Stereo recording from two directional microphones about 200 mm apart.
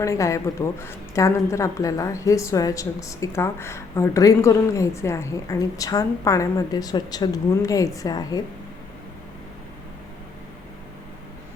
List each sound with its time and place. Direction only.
0.0 s a woman's voice: 15° left (ahead or behind)